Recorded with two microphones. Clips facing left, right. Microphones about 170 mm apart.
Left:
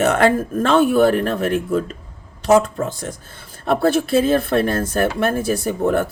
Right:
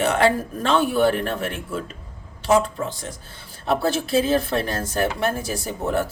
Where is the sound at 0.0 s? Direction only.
50° left (ahead or behind).